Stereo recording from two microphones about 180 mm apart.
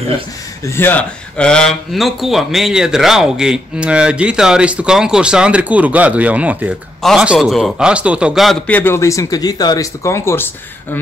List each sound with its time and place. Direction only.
0.7 s a man's voice: 10° left (ahead or behind)